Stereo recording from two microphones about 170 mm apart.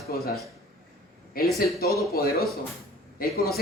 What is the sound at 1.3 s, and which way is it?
Speech, 60° left (ahead or behind).